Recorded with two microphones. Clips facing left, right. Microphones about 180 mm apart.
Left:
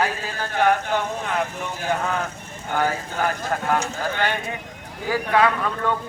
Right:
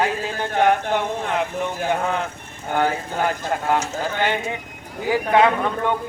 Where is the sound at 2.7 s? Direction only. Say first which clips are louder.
Right 2 dB; 20° right (ahead or behind).